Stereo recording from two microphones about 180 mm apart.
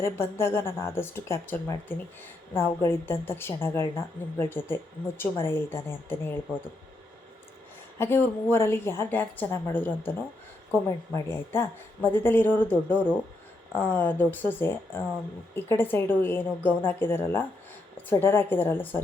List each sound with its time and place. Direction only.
0.0 s a woman's voice: 15° left (ahead or behind)
7.9 s a woman's voice: 10° left (ahead or behind)